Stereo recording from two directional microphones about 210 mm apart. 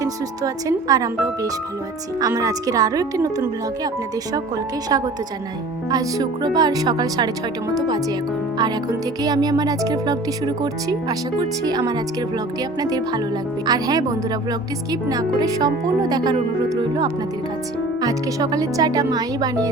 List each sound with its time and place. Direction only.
0.0 s speech: 15° right (ahead or behind)
5.9 s speech: 15° right (ahead or behind)